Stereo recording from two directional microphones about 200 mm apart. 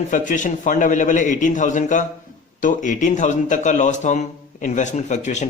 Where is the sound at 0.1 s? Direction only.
40° left (ahead or behind).